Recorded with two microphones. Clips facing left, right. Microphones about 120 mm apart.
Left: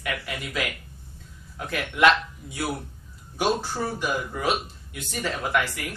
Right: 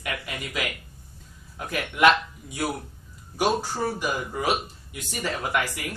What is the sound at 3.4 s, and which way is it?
A man's voice, 10° right (ahead or behind).